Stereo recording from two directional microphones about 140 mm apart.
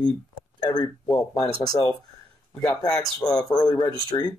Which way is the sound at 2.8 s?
25° left (ahead or behind).